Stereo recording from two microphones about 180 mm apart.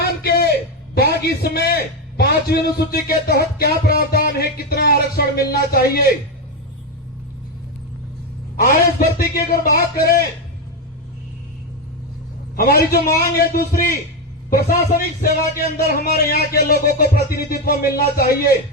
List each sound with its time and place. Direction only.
0.0 s a sound: 60° left (ahead or behind)
0.9 s a man's voice: 60° left (ahead or behind)
8.7 s a man's voice: 55° left (ahead or behind)
12.5 s a man's voice: 55° left (ahead or behind)